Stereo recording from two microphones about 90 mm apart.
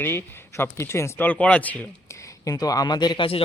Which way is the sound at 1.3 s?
15° left (ahead or behind).